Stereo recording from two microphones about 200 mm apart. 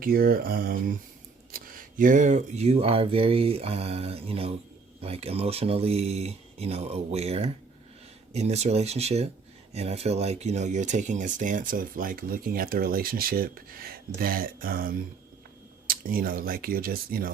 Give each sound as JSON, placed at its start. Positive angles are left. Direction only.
{"t": 0.0, "sound": "speech", "side_deg": -45}